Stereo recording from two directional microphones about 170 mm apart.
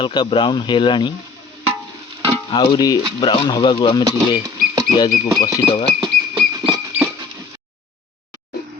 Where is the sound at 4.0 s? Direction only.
20° right (ahead or behind).